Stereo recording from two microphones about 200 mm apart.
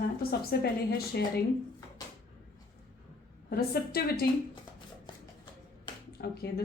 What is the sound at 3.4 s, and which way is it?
Speech, 50° left (ahead or behind).